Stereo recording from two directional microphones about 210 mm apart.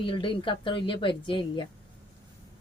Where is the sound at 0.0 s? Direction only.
25° left (ahead or behind).